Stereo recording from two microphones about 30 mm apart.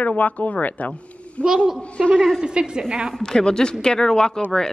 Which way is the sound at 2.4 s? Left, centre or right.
Right.